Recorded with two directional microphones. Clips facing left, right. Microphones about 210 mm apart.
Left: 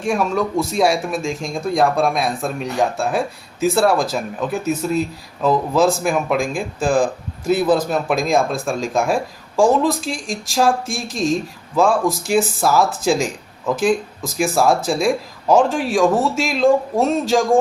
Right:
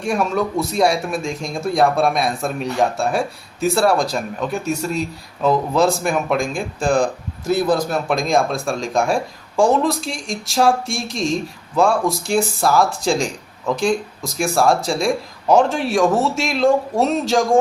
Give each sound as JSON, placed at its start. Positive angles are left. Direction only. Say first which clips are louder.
{"t": 0.0, "sound": "speech", "louder": "left 1 dB", "side_deg": 0}